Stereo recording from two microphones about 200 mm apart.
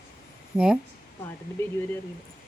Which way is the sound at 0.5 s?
5° right (ahead or behind).